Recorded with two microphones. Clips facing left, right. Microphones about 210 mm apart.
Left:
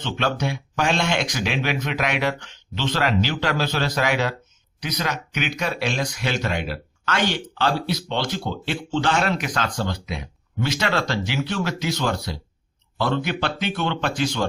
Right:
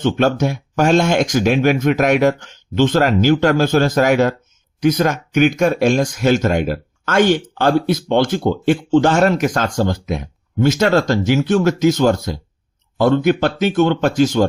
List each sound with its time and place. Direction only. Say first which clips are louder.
0.0 s speech: right 9 dB; 45° right (ahead or behind)